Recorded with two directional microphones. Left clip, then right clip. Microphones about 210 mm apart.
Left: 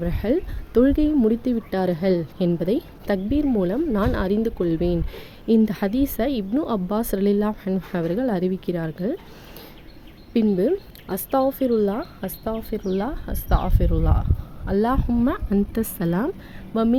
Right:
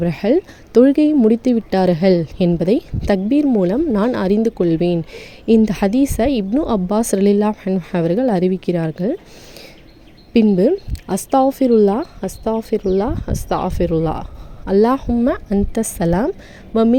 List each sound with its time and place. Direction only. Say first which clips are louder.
0.0 s speech: right 7 dB; 30° right (ahead or behind)
10.3 s speech: right 7 dB; 25° right (ahead or behind)